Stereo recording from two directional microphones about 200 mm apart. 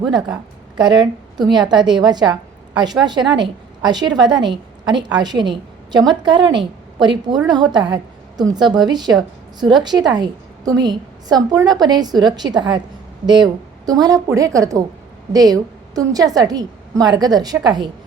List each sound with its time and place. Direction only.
0.8 s a woman's voice: 20° right (ahead or behind)